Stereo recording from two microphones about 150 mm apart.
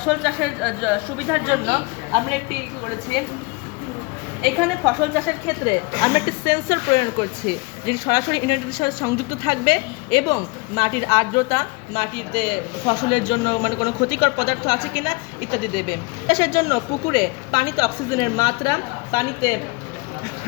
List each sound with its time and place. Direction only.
0.0 s a woman's voice: centre (ahead or behind)
4.4 s a woman's voice: 5° left (ahead or behind)
5.5 s a woman's voice: 25° left (ahead or behind)